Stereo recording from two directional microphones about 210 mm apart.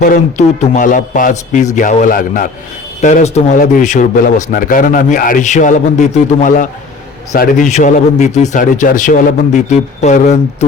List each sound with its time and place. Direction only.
0.0 s a man's voice: 35° left (ahead or behind)